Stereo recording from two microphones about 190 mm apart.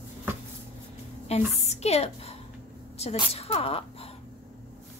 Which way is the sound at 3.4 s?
30° left (ahead or behind).